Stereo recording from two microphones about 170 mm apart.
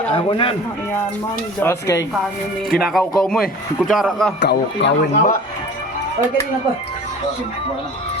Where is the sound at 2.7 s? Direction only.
Centre (ahead or behind).